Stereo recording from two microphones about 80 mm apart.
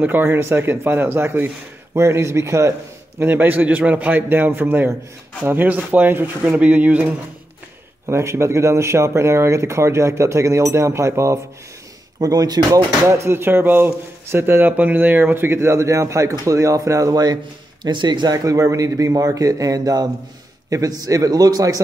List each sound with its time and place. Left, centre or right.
0.0 s a man's voice: right
3.2 s a man's voice: right
8.1 s speech: right
12.2 s speech: right
13.0 s speech: right
17.8 s speech: right
18.4 s speech: right